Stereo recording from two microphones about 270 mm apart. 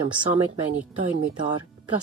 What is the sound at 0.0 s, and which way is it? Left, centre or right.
Speech, centre.